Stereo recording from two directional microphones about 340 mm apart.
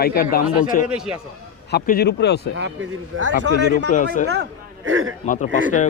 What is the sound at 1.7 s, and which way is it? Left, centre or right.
Speech, left.